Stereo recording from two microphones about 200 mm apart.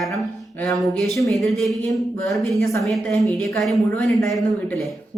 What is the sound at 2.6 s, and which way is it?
Speech, 15° left (ahead or behind).